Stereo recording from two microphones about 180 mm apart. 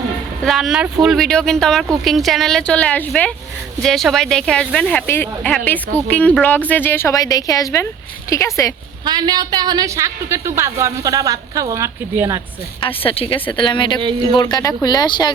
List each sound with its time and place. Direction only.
0.4 s a woman's voice: centre (ahead or behind); by 8.7 s 15° left (ahead or behind)
9.0 s a woman's voice: 25° right (ahead or behind)
12.8 s speech: 30° left (ahead or behind)
14.0 s a woman's voice: 25° right (ahead or behind)
14.3 s speech: 25° left (ahead or behind)